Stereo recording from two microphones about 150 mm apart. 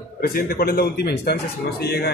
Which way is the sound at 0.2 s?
85° left.